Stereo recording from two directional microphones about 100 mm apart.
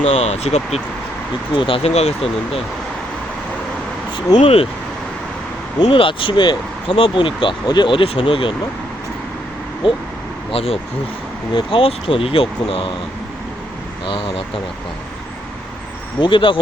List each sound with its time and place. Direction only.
0.1 s speech: 90° left
1.5 s speech: 60° left (ahead or behind); by 2.6 s 85° left
4.4 s speech: 70° left (ahead or behind)
5.9 s speech: 60° left (ahead or behind)
9.8 s speech: 50° left (ahead or behind)
10.5 s speech: 80° left
14.1 s speech: 60° left (ahead or behind)
16.2 s speech: 55° left (ahead or behind)